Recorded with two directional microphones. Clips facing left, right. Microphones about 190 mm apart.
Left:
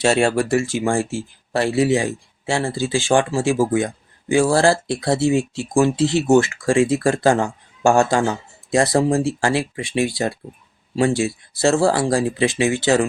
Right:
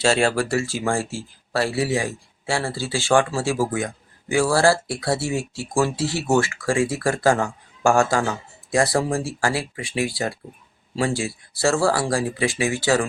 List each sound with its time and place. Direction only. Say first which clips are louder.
0.0 s speech: left 3 dB; 20° left (ahead or behind)